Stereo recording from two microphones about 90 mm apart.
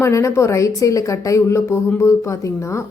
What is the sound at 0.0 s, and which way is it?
A woman's voice, 35° left (ahead or behind).